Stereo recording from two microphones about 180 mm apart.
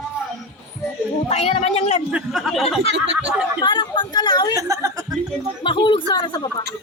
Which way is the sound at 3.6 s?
25° left (ahead or behind).